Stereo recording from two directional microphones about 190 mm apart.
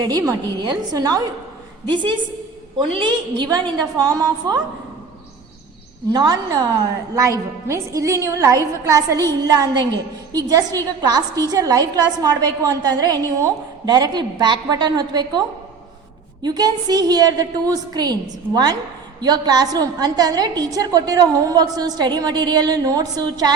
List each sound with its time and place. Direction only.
0.0 s a woman's voice: 20° right (ahead or behind)
2.7 s a woman's voice: 25° right (ahead or behind)
6.1 s a woman's voice: 20° right (ahead or behind)